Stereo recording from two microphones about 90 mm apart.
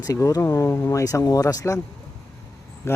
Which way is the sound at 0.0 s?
40° left (ahead or behind).